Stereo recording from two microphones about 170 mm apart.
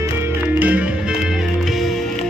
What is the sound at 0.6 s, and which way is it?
Music, 10° right (ahead or behind).